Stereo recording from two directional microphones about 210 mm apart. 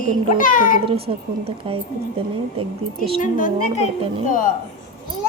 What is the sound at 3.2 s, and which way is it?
A woman's voice, 40° left (ahead or behind).